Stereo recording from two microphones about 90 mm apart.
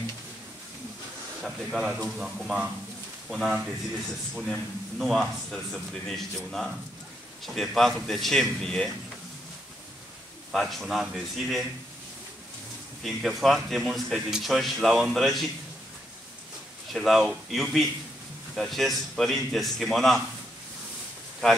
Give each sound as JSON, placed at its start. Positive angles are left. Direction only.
{"t": 1.4, "sound": "a man's voice", "side_deg": -5}
{"t": 10.5, "sound": "a man's voice", "side_deg": 0}
{"t": 13.0, "sound": "a man's voice", "side_deg": 0}
{"t": 16.9, "sound": "a man's voice", "side_deg": 0}